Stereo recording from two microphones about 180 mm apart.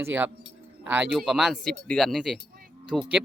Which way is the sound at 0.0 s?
10° right (ahead or behind).